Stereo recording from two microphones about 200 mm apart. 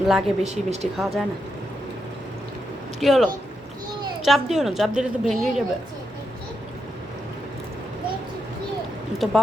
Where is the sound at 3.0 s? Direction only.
Centre (ahead or behind).